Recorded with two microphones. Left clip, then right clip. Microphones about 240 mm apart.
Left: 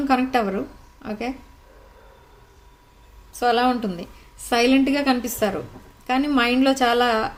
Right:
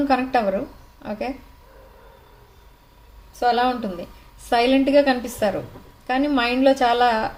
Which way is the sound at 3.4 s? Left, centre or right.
Left.